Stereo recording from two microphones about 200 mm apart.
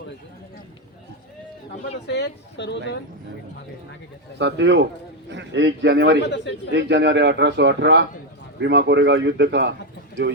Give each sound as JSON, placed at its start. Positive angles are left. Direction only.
{"t": 2.0, "sound": "speech", "side_deg": 60}
{"t": 4.4, "sound": "speech", "side_deg": -60}
{"t": 6.2, "sound": "speech", "side_deg": 60}
{"t": 6.7, "sound": "speech", "side_deg": -60}